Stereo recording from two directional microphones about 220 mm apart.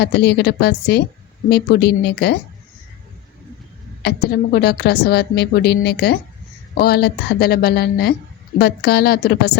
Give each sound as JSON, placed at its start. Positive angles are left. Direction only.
{"t": 0.0, "sound": "a woman's voice", "side_deg": 50}
{"t": 4.0, "sound": "a woman's voice", "side_deg": 45}